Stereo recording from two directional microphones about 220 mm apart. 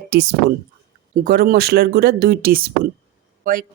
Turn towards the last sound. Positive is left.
turn(degrees=-40)  # may be behind; listen again after turning